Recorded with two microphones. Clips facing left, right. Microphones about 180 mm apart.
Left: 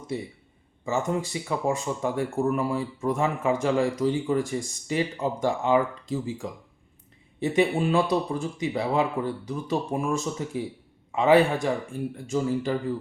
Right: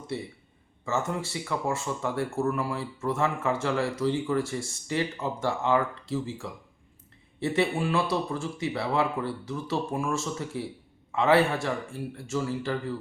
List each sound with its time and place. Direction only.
0.1 s speech: 15° left (ahead or behind)